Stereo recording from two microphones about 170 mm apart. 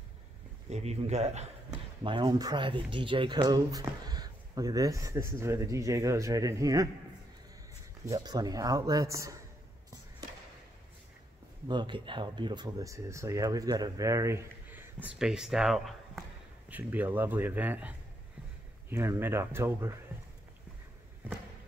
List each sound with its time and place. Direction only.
0.7 s a man's voice: 40° right (ahead or behind)
2.0 s speech: 30° right (ahead or behind)
8.0 s speech: 20° right (ahead or behind)
11.6 s speech: 25° right (ahead or behind)